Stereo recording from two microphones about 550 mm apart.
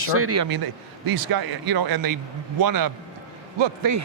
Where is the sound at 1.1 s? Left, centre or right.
Right.